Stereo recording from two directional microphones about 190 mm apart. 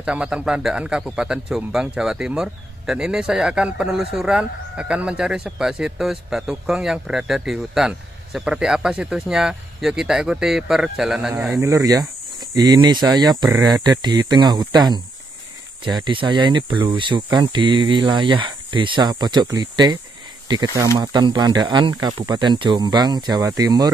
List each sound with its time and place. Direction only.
0.0 s a man's voice: 5° right (ahead or behind)